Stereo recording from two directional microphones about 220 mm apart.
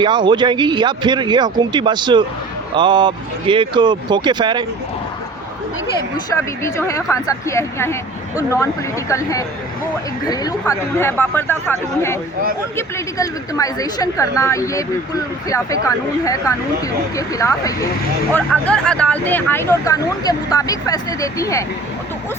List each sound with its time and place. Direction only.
0.0 s speech: 20° right (ahead or behind)
6.3 s a woman's voice: 10° left (ahead or behind)